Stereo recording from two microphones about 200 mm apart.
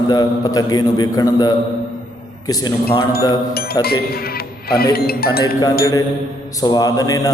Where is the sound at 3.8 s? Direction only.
50° left (ahead or behind).